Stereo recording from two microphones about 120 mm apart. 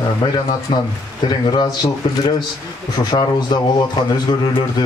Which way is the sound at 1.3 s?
35° left (ahead or behind).